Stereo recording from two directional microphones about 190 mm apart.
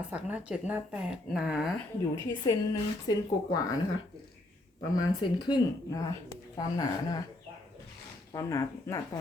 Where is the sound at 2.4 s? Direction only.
20° left (ahead or behind).